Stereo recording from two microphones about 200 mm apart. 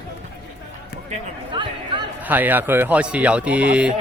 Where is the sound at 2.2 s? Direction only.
10° right (ahead or behind).